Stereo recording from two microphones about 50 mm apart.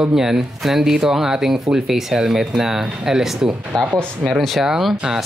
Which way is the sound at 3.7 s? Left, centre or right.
Centre.